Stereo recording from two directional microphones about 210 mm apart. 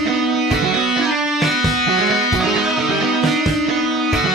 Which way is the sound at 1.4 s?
Centre (ahead or behind).